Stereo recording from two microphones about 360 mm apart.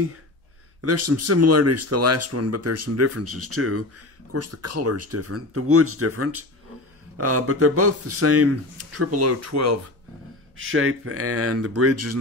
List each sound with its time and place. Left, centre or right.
0.7 s speech: right
10.6 s speech: right